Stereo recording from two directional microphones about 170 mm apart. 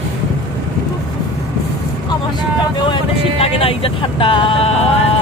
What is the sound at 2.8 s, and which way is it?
Vehicle, 30° left (ahead or behind).